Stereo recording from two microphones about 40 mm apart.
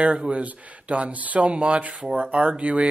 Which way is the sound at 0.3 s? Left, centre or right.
Right.